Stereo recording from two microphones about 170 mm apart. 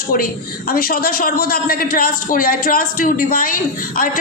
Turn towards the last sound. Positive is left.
turn(degrees=55)  # may be behind; listen again after turning